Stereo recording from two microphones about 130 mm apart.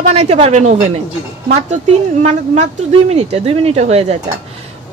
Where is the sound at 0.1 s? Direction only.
55° right (ahead or behind).